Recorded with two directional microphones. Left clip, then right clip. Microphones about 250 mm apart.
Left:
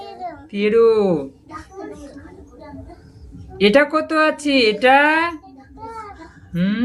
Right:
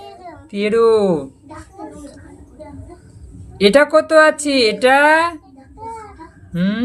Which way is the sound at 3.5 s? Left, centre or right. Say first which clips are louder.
Right 3 dB; centre.